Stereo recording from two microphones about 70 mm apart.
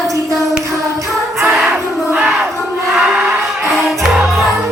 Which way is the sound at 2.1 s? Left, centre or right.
Centre.